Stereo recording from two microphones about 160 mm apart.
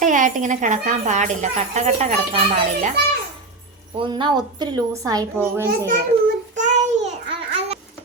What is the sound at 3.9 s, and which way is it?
A woman's voice, 30° right (ahead or behind).